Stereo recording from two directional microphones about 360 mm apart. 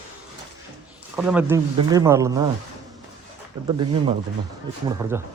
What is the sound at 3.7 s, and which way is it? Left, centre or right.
Speech, centre.